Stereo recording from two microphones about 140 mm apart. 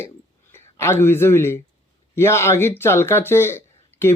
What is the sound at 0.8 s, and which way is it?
Speech, 20° left (ahead or behind).